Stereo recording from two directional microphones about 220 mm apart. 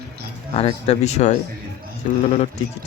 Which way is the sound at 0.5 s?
30° left (ahead or behind).